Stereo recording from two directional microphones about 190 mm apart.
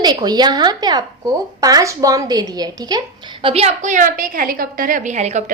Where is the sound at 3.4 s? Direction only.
30° right (ahead or behind).